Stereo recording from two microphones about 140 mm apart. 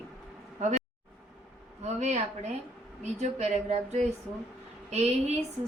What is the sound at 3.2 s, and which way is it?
Speech, 55° right (ahead or behind).